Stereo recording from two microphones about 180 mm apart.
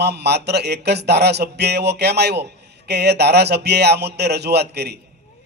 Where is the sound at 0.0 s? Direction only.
65° right (ahead or behind).